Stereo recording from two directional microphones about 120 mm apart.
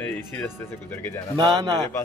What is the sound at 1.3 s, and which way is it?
Speech, 30° right (ahead or behind).